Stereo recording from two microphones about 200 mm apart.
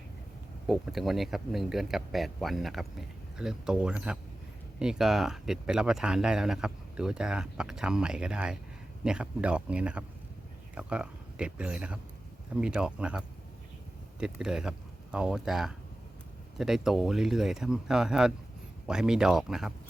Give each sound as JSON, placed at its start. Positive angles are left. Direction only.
{"t": 0.7, "sound": "speech", "side_deg": 0}